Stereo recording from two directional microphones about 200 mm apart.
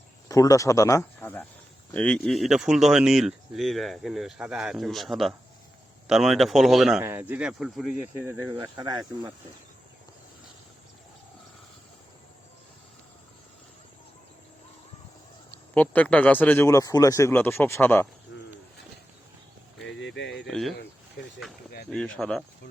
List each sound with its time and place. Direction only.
0.3 s speech: 15° left (ahead or behind); by 8.3 s 5° right (ahead or behind)
8.5 s speech: 15° right (ahead or behind)
15.5 s speech: 5° left (ahead or behind)
19.9 s a sound: 65° left (ahead or behind)
20.5 s speech: centre (ahead or behind)
21.8 s speech: 5° left (ahead or behind)